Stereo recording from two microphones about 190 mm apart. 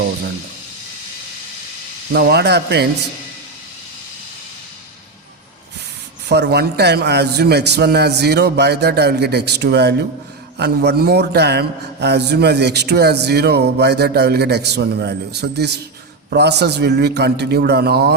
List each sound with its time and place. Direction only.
2.1 s a man's voice: 60° right (ahead or behind)
6.2 s a man's voice: 60° right (ahead or behind)